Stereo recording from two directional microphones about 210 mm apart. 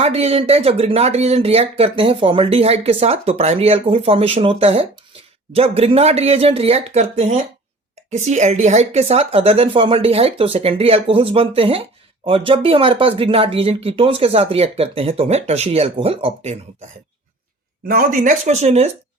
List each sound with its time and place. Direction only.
0.0 s a woman's voice: 30° right (ahead or behind)
17.8 s speech: 45° right (ahead or behind)